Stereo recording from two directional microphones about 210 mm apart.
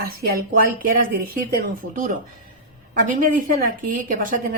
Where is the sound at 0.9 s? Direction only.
40° right (ahead or behind).